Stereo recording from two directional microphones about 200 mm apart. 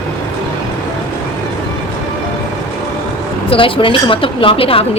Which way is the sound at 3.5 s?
25° left (ahead or behind).